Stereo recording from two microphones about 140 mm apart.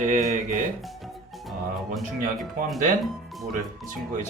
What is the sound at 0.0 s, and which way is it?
Speech, 60° right (ahead or behind).